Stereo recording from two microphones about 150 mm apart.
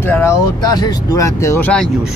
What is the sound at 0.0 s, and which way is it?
Speech, 15° left (ahead or behind).